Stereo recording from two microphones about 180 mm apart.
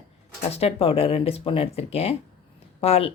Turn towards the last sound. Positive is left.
turn(degrees=35)  # may be behind; listen again after turning